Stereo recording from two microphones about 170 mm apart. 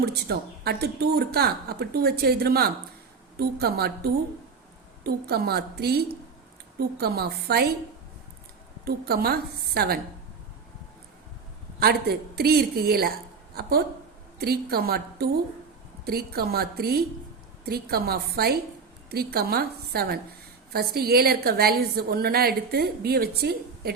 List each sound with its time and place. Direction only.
0.0 s speech: 70° right (ahead or behind)
7.0 s speech: 65° right (ahead or behind)
8.8 s a woman's voice: 65° right (ahead or behind)
11.8 s a woman's voice: 65° right (ahead or behind)